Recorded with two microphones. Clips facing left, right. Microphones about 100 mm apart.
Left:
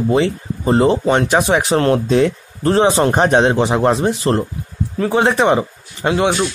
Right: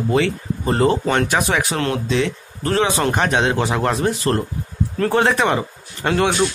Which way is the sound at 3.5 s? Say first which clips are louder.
Left 5 dB; 25° left (ahead or behind).